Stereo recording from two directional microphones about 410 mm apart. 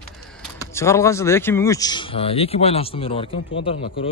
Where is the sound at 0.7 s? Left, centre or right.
Centre.